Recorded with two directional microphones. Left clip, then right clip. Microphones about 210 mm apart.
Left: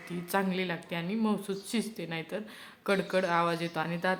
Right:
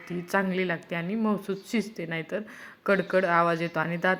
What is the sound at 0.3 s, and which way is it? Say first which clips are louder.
A woman's voice: right 4 dB; 20° right (ahead or behind).